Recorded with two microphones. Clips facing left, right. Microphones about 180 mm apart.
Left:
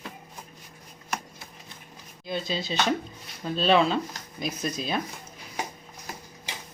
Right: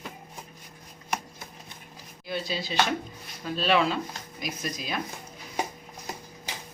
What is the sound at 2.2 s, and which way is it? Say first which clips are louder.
Speech: left 2 dB; 20° left (ahead or behind).